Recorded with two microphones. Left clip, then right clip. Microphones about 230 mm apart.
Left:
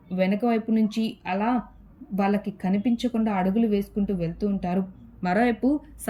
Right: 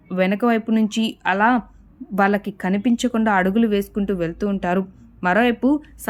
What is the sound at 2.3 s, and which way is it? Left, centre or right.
Speech, right.